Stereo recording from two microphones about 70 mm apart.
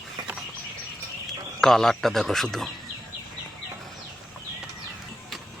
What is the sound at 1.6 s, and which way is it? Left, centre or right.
Speech, centre.